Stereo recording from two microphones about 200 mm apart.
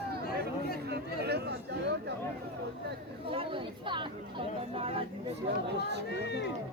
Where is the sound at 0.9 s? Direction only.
55° right (ahead or behind).